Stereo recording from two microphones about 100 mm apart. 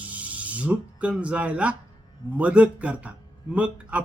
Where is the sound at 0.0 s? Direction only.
15° right (ahead or behind).